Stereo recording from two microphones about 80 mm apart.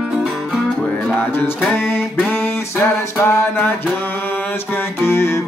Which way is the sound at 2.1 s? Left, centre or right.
Left.